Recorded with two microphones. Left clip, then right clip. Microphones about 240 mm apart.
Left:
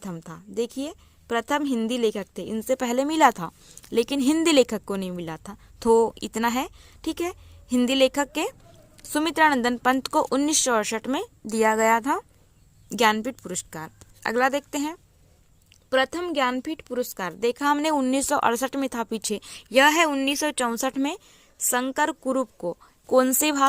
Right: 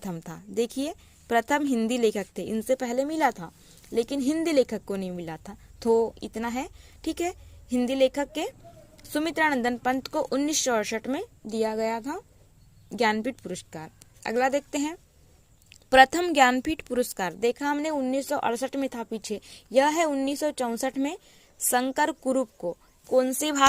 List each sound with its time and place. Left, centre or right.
0.0 s a woman's voice: centre
15.7 s a woman's voice: centre
22.7 s speech: centre